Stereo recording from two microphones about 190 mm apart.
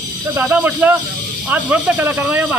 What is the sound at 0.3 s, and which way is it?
Speech, 10° right (ahead or behind).